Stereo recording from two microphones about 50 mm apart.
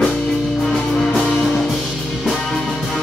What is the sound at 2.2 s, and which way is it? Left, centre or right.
Music, centre.